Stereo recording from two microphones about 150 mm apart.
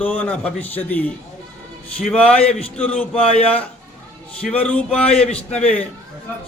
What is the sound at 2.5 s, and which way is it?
Speech, 40° left (ahead or behind).